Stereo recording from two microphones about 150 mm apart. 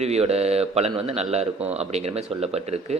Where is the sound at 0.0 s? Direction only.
45° right (ahead or behind).